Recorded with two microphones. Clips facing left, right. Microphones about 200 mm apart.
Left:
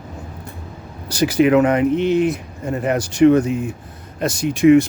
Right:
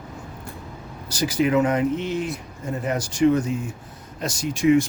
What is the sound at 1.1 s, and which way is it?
Speech, 65° left (ahead or behind).